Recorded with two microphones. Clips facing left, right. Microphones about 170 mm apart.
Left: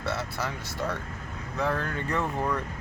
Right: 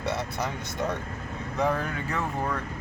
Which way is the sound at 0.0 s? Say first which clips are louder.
Right 2 dB; 15° right (ahead or behind).